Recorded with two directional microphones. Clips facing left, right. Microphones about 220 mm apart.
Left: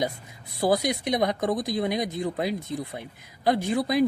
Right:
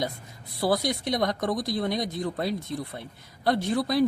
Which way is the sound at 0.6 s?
15° left (ahead or behind).